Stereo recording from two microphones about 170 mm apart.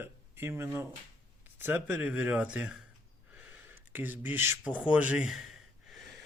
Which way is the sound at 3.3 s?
10° right (ahead or behind).